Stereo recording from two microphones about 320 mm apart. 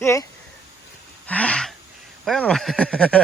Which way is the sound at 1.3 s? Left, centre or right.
Centre.